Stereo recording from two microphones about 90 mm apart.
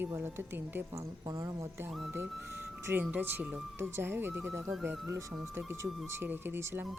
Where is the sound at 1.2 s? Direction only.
40° right (ahead or behind).